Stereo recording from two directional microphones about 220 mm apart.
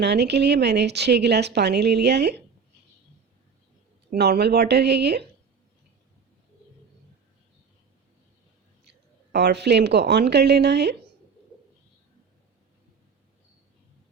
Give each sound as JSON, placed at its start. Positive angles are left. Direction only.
{"t": 0.0, "sound": "a woman's voice", "side_deg": -50}
{"t": 4.1, "sound": "a woman's voice", "side_deg": -45}
{"t": 9.3, "sound": "a woman's voice", "side_deg": -50}